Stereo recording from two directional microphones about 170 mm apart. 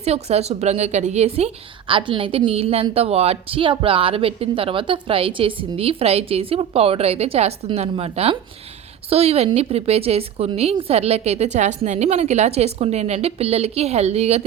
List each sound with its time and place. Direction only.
0.0 s a woman's voice: 40° right (ahead or behind)